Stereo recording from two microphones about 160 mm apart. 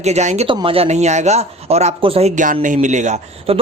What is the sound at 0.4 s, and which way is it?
A man's voice, 35° right (ahead or behind).